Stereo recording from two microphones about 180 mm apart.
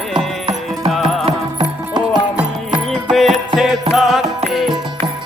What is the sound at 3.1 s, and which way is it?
Music, centre (ahead or behind).